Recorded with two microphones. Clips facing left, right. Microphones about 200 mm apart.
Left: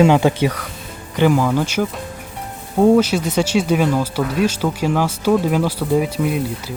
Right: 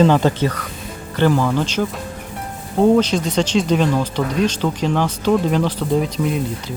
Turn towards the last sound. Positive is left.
turn(degrees=5)  # may be behind; listen again after turning